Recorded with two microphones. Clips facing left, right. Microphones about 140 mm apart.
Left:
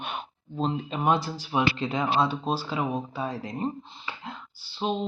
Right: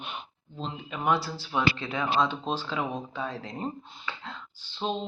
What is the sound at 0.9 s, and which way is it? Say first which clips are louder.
Speech: even; 25° left (ahead or behind).